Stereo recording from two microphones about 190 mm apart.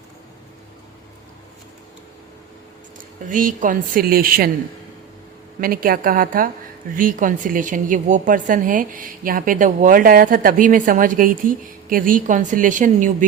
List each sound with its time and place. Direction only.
3.2 s a woman's voice: 45° right (ahead or behind)
5.5 s a woman's voice: 50° right (ahead or behind)